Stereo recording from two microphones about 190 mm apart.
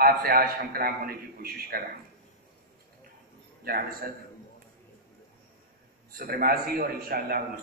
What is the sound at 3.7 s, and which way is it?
Speech, 50° right (ahead or behind).